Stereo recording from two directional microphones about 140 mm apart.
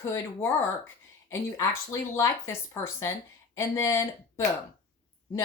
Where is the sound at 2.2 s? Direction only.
20° left (ahead or behind).